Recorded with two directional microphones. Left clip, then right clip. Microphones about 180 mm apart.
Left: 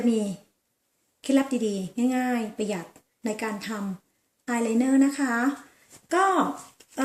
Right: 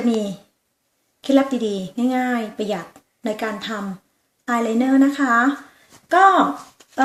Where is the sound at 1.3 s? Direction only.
20° left (ahead or behind).